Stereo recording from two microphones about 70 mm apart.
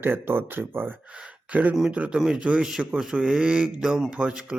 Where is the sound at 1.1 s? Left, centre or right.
Centre.